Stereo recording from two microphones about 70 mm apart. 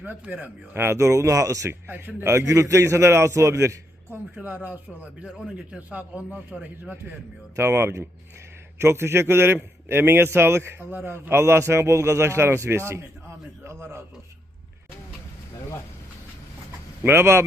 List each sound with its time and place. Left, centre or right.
0.0 s a man's voice: right
0.9 s a man's voice: right
4.4 s a man's voice: right
7.5 s a man's voice: right
17.0 s a man's voice: right